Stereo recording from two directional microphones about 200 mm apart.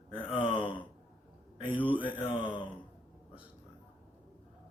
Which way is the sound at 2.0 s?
25° left (ahead or behind).